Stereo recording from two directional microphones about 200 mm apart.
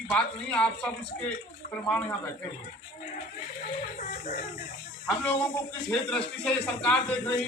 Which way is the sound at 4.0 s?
40° left (ahead or behind).